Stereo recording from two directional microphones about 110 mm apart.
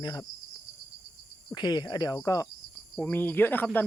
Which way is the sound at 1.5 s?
40° left (ahead or behind).